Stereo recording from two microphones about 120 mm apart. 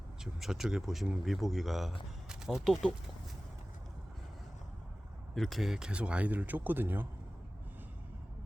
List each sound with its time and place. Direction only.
0.3 s speech: 5° right (ahead or behind)
5.3 s speech: centre (ahead or behind); by 7.1 s 15° right (ahead or behind)